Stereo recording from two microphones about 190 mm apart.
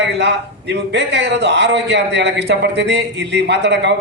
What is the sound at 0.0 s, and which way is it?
A man's voice, 65° right (ahead or behind).